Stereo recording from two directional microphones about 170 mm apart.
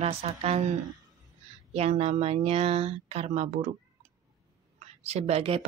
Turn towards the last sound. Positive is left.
turn(degrees=-35)  # may be behind; listen again after turning